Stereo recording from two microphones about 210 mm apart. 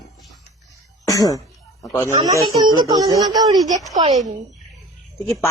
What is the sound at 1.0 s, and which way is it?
Speech, 15° left (ahead or behind).